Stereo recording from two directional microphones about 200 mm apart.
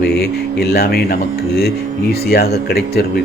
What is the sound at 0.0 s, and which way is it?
Speech, 55° left (ahead or behind).